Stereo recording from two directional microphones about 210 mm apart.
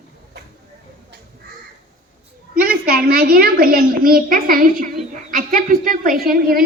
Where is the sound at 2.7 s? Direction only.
45° right (ahead or behind).